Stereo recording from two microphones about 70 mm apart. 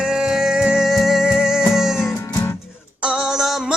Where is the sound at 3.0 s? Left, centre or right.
Centre.